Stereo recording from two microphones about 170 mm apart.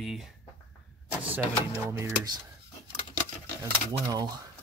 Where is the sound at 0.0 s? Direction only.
Centre (ahead or behind).